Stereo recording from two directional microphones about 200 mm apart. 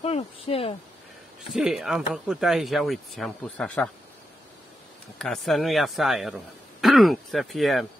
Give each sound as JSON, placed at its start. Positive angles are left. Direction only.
{"t": 0.0, "sound": "speech", "side_deg": 30}
{"t": 1.4, "sound": "speech", "side_deg": 0}
{"t": 5.2, "sound": "speech", "side_deg": 0}